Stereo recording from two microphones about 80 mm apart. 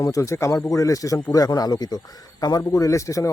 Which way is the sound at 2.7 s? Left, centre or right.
Left.